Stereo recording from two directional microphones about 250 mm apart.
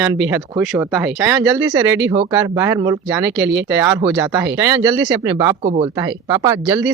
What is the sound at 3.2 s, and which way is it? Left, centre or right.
Speech, right.